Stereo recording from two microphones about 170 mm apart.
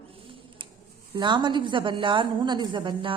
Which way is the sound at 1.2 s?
25° right (ahead or behind).